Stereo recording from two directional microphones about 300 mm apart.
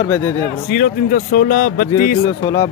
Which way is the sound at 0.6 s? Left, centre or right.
Left.